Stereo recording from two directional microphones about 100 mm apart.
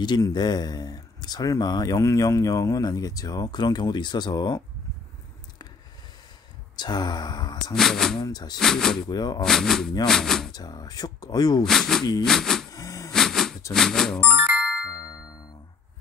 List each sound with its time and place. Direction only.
0.0 s speech: 45° left (ahead or behind)
6.8 s speech: 45° left (ahead or behind)
7.7 s music: 5° left (ahead or behind)
8.2 s speech: 40° left (ahead or behind)
8.5 s music: 5° left (ahead or behind)
9.1 s speech: 40° left (ahead or behind)
9.4 s music: 5° left (ahead or behind)
10.5 s speech: 40° left (ahead or behind)
11.6 s music: 5° left (ahead or behind)
12.3 s speech: 5° left (ahead or behind)
12.7 s hiss: 35° left (ahead or behind)
13.1 s a sound: 5° left (ahead or behind)
13.7 s music: 5° left (ahead or behind)
14.3 s music: 15° right (ahead or behind)